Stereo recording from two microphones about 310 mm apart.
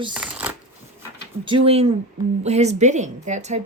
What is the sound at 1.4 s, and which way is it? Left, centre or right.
A woman's voice, centre.